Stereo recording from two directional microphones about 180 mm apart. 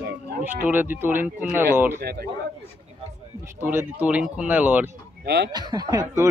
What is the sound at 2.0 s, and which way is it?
Speech, 60° right (ahead or behind).